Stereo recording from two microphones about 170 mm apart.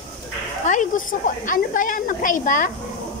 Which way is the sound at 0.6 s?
45° left (ahead or behind).